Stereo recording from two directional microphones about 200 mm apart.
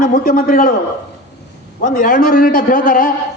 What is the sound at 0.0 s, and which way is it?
Speech, 45° left (ahead or behind).